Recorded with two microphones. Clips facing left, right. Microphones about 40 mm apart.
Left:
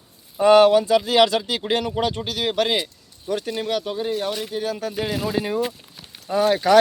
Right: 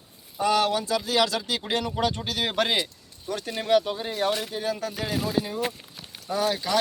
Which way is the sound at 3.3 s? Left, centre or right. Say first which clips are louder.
Left 6 dB; centre.